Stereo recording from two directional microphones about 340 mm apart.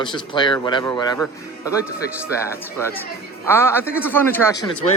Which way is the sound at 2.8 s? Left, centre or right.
Centre.